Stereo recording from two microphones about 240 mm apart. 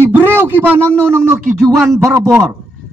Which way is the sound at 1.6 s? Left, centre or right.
Centre.